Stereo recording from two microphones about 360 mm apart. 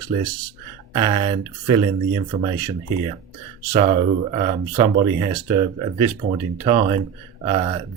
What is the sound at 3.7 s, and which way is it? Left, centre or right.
Speech, centre.